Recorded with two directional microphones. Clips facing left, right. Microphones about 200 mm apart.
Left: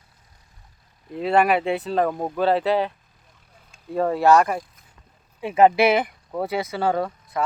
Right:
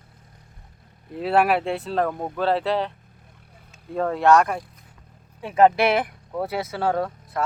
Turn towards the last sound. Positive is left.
turn(degrees=0)  # may be behind; listen again after turning